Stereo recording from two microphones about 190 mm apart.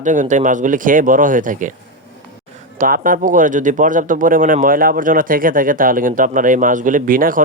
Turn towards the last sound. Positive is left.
turn(degrees=-45)  # may be behind; listen again after turning